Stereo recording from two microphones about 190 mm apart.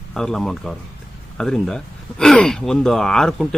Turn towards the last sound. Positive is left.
turn(degrees=0)  # may be behind; listen again after turning